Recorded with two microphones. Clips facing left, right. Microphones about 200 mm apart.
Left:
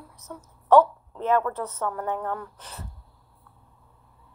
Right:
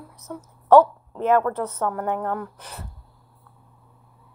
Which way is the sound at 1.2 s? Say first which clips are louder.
Right 4 dB; 55° right (ahead or behind).